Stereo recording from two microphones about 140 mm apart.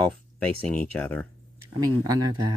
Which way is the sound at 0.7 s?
5° left (ahead or behind).